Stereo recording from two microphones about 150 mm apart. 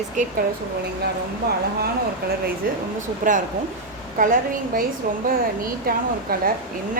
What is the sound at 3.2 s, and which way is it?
A woman's voice, 65° right (ahead or behind).